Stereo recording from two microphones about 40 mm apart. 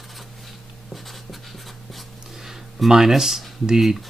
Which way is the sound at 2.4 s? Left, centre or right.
Centre.